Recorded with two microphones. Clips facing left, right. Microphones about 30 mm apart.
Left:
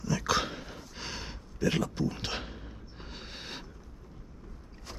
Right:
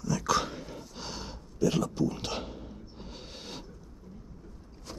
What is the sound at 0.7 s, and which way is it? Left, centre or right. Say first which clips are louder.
Gasp: even; centre.